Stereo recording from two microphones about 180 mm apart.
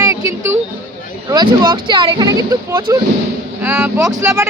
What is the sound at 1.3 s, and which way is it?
Speech, 25° right (ahead or behind).